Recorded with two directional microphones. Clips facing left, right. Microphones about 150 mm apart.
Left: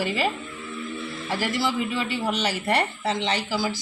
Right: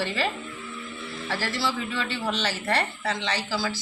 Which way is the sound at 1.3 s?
15° left (ahead or behind).